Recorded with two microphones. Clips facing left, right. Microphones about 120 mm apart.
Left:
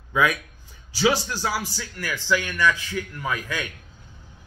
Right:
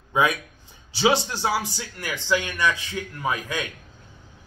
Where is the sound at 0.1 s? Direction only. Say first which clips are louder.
Even; 25° right (ahead or behind).